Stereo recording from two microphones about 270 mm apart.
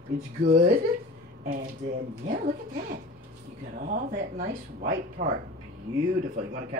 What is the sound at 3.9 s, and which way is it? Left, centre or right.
Speech, right.